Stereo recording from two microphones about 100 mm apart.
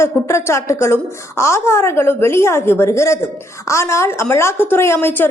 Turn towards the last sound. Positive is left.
turn(degrees=20)  # may be behind; listen again after turning